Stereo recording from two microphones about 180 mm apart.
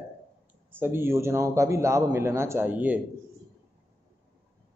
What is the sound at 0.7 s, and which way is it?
A man's voice, 15° right (ahead or behind).